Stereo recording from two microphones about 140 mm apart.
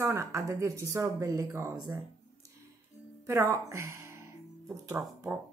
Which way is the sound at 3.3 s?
20° right (ahead or behind).